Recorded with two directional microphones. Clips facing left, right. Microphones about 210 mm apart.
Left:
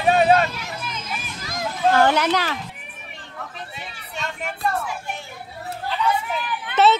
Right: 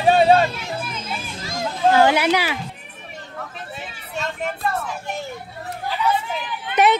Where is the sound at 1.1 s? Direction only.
25° right (ahead or behind).